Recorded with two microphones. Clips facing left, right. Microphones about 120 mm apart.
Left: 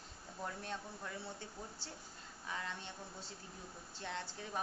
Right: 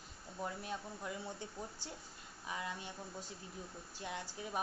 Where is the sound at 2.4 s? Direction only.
15° right (ahead or behind).